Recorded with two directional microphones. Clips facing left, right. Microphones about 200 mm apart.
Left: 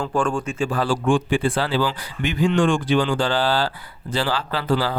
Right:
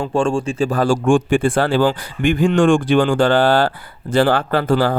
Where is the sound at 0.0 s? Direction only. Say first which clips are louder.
Right 5 dB; 25° right (ahead or behind).